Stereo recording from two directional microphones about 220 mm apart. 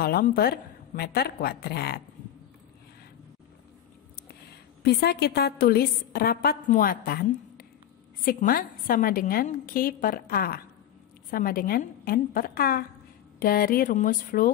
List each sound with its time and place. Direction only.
0.0 s a woman's voice: 45° left (ahead or behind)
4.8 s a woman's voice: 45° left (ahead or behind)